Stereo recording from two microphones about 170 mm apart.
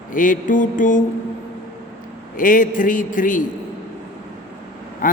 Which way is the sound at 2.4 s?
50° left (ahead or behind).